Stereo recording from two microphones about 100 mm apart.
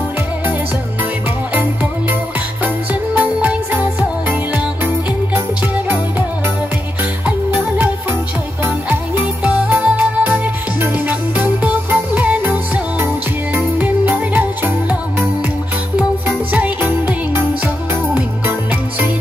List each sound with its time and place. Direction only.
2.6 s music: 15° right (ahead or behind)
7.2 s music: 15° right (ahead or behind)
16.3 s music: 20° right (ahead or behind)